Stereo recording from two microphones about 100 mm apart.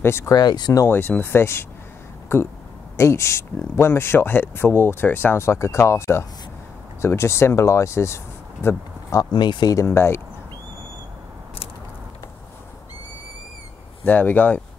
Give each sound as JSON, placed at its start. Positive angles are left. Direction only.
{"t": 0.0, "sound": "speech", "side_deg": 25}
{"t": 0.3, "sound": "speech", "side_deg": 45}
{"t": 0.8, "sound": "speech", "side_deg": 20}
{"t": 9.3, "sound": "speech", "side_deg": 50}
{"t": 9.8, "sound": "speech", "side_deg": 25}
{"t": 14.0, "sound": "speech", "side_deg": 15}